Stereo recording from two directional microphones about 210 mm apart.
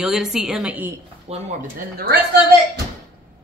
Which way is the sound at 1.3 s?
30° right (ahead or behind).